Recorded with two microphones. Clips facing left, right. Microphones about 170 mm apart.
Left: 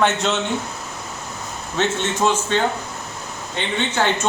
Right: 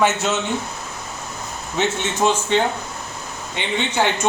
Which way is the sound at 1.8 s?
15° right (ahead or behind).